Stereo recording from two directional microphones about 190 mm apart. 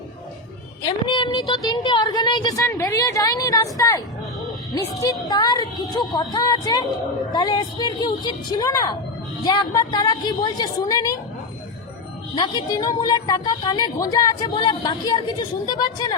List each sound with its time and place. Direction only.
1.0 s a woman's voice: 25° left (ahead or behind)
12.3 s a woman's voice: 20° left (ahead or behind)